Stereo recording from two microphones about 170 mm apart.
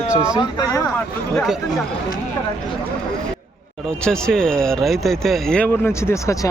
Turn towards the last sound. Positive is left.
turn(degrees=15)  # may be behind; listen again after turning